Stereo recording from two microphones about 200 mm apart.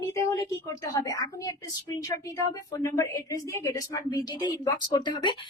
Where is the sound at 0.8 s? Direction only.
15° left (ahead or behind).